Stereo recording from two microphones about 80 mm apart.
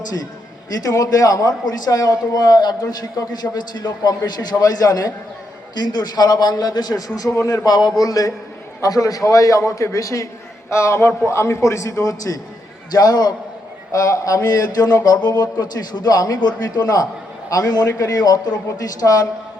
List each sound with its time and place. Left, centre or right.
0.9 s a man's voice: left
4.2 s a man's voice: left
13.9 s a man's voice: left